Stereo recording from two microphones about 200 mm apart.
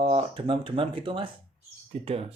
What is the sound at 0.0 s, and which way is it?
Speech, 25° right (ahead or behind).